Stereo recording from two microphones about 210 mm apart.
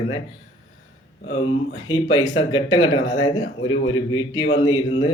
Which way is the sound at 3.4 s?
65° left (ahead or behind).